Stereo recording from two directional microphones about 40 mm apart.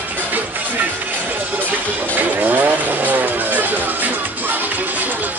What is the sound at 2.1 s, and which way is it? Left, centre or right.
Vehicle, right.